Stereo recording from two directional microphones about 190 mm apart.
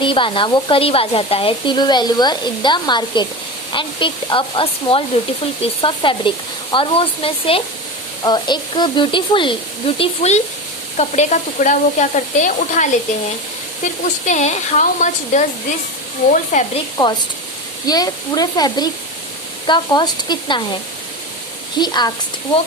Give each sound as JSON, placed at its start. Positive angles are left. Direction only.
{"t": 0.0, "sound": "sizzle", "side_deg": 25}
{"t": 10.9, "sound": "stir", "side_deg": 40}
{"t": 17.8, "sound": "sizzle", "side_deg": 20}
{"t": 21.8, "sound": "sizzle", "side_deg": 20}